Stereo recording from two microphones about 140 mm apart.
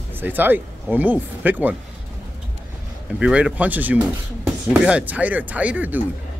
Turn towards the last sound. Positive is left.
turn(degrees=-10)  # may be behind; listen again after turning